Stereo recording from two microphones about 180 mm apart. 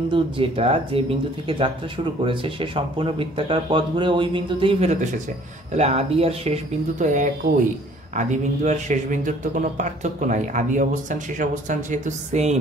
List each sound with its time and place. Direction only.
0.1 s speech: 30° right (ahead or behind)
2.2 s speech: 30° right (ahead or behind)